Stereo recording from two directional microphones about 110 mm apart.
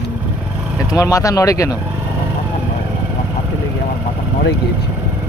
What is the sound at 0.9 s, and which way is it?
Speech, 30° left (ahead or behind).